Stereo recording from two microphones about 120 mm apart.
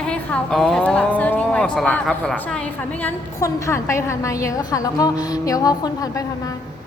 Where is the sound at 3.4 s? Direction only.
25° left (ahead or behind).